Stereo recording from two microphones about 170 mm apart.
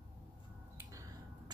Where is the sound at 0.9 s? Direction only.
20° right (ahead or behind).